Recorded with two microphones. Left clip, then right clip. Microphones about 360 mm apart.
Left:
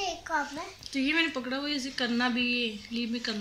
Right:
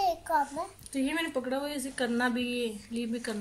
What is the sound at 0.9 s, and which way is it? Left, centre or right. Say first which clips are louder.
Speech: left 6 dB; right.